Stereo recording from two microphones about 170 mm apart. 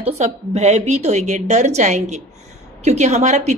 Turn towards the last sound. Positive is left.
turn(degrees=-40)  # may be behind; listen again after turning